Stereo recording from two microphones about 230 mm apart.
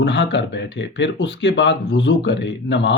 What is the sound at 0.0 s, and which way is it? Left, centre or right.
Speech, left.